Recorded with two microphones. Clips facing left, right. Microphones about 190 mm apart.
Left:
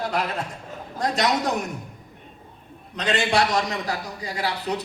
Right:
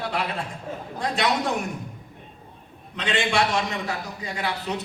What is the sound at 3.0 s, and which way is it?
A man's voice, 40° left (ahead or behind).